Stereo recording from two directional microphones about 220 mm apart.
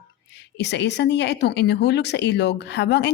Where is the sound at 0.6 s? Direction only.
50° left (ahead or behind).